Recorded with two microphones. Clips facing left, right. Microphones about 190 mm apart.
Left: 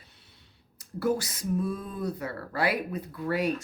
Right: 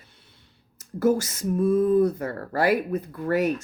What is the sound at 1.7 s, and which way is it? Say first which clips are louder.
Speech: right 14 dB; 55° right (ahead or behind).